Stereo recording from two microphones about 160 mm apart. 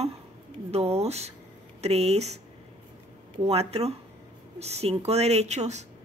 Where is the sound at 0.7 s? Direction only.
40° right (ahead or behind).